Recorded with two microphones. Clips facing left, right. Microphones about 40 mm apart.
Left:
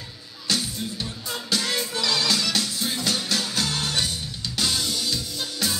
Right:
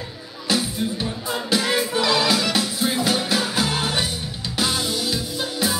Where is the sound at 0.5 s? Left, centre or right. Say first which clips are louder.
Right 5 dB; centre.